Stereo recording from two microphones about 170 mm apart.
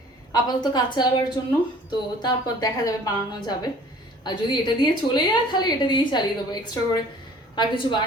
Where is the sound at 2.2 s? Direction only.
20° left (ahead or behind).